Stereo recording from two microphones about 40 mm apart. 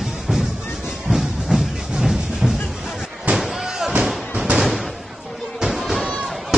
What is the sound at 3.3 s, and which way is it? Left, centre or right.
Slam, right.